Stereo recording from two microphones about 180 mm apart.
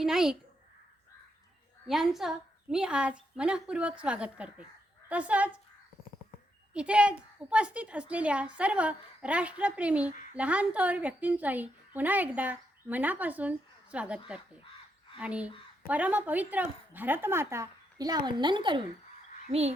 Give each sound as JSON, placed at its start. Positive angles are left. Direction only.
{"t": 0.0, "sound": "a sound", "side_deg": 0}
{"t": 1.9, "sound": "a woman's voice", "side_deg": 0}
{"t": 6.7, "sound": "a woman's voice", "side_deg": -5}
{"t": 15.2, "sound": "a woman's voice", "side_deg": -5}
{"t": 19.5, "sound": "frog", "side_deg": -35}